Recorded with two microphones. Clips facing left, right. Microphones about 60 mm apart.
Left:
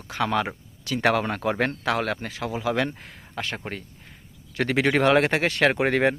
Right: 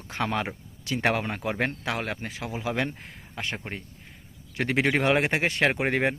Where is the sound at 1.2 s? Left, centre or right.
Centre.